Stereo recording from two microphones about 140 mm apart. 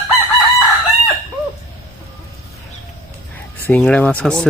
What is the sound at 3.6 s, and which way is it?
Speech, 10° left (ahead or behind).